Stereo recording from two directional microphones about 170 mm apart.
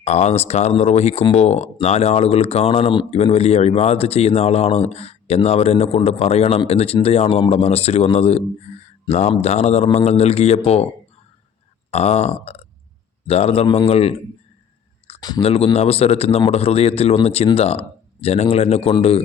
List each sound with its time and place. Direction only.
0.0 s speech: 40° left (ahead or behind)
11.9 s speech: 40° left (ahead or behind)
15.4 s speech: 35° left (ahead or behind)